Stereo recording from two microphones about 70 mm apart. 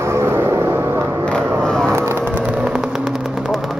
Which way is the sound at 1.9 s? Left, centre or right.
Right.